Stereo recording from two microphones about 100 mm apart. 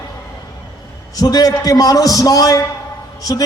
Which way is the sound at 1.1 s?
40° left (ahead or behind).